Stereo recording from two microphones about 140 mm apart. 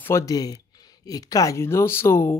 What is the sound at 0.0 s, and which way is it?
Speech, 20° left (ahead or behind).